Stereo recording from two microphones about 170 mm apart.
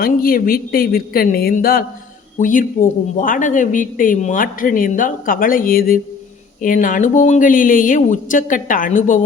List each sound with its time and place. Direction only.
0.0 s a woman's voice: 60° left (ahead or behind)